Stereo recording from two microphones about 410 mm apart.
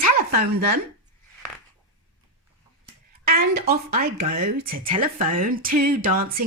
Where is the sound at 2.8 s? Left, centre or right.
Right.